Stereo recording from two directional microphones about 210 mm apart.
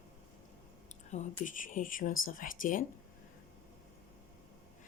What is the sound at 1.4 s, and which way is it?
Speech, 40° left (ahead or behind).